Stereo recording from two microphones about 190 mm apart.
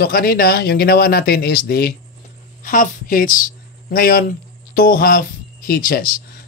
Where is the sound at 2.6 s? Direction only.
45° left (ahead or behind).